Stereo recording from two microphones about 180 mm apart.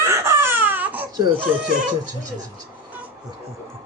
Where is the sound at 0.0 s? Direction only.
15° right (ahead or behind).